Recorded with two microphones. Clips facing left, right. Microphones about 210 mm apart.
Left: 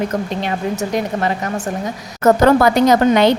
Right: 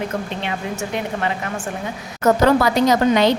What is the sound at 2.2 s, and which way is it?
A woman's voice, 50° left (ahead or behind).